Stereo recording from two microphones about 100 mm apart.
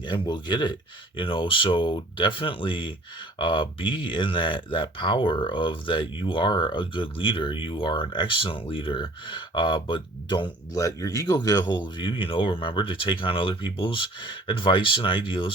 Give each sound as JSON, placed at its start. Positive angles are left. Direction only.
{"t": 0.0, "sound": "speech", "side_deg": 50}
{"t": 10.8, "sound": "speech", "side_deg": 35}